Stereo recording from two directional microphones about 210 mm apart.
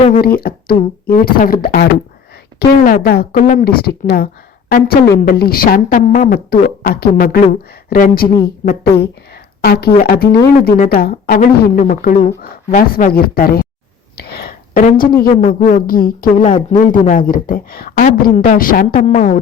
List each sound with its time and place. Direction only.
0.2 s speech: 45° left (ahead or behind)
14.2 s a sound: 50° left (ahead or behind)
14.8 s a woman's voice: 45° left (ahead or behind)